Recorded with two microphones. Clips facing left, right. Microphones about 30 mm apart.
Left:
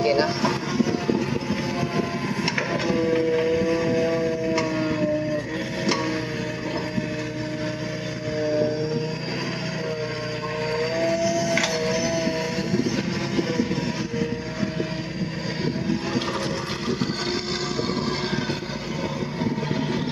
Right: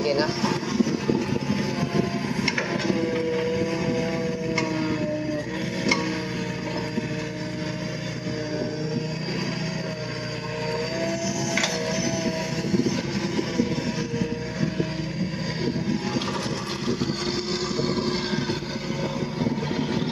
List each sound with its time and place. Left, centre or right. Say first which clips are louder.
0.0 s speech: left 2 dB; centre
2.4 s music: left 1 dB; centre
10.7 s a sound: left 4 dB; centre
11.1 s music: left 5 dB; left
11.5 s music: left 2 dB; centre